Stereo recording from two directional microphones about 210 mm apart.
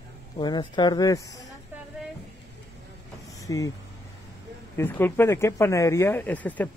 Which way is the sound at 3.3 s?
15° left (ahead or behind).